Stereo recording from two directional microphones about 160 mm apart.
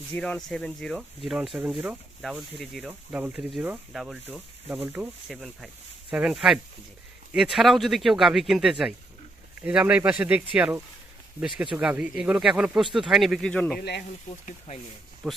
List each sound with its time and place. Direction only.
0.1 s speech: 5° left (ahead or behind)
13.7 s speech: 90° left